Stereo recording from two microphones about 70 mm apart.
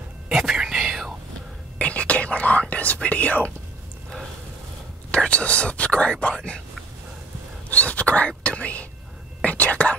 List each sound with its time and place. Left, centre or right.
0.3 s whispering: centre
1.8 s whispering: centre
2.7 s speech: left
5.1 s speech: centre
7.7 s whispering: centre